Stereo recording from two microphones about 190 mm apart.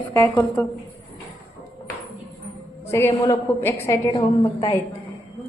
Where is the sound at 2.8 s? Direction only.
15° left (ahead or behind).